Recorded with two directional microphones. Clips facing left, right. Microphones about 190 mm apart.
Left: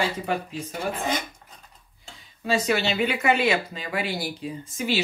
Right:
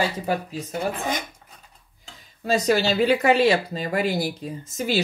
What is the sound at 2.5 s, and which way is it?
Speech, 40° right (ahead or behind).